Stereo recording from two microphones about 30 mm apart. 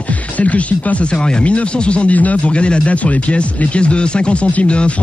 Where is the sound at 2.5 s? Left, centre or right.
Left.